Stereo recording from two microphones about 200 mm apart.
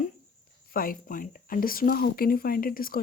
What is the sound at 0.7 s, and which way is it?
Speech, 45° left (ahead or behind).